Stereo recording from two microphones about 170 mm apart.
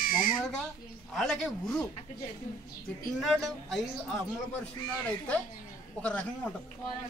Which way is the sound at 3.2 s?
Centre (ahead or behind).